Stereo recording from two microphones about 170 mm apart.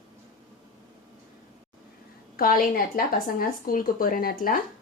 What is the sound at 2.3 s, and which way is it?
Speech, 60° left (ahead or behind).